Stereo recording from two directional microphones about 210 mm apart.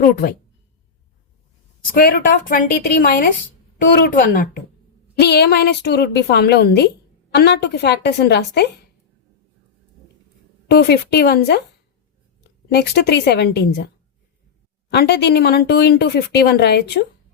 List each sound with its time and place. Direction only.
0.0 s speech: 45° left (ahead or behind)
1.9 s a woman's voice: 45° left (ahead or behind)
10.7 s a woman's voice: 50° left (ahead or behind)
14.8 s speech: 50° left (ahead or behind)